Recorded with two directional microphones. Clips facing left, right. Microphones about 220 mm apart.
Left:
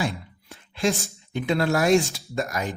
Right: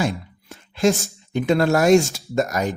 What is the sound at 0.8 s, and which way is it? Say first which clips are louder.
Speech: right 6 dB; 45° right (ahead or behind).